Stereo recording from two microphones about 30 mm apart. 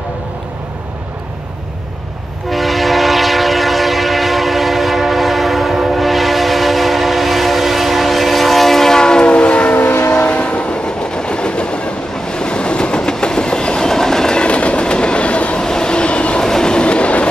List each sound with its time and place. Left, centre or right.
2.5 s train: centre
9.0 s train: left
9.3 s train: left; by 14.3 s centre
14.3 s train: left
15.6 s train: left
16.3 s train: left
16.7 s train: left